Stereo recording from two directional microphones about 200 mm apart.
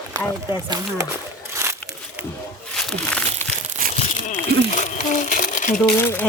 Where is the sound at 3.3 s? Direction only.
45° right (ahead or behind).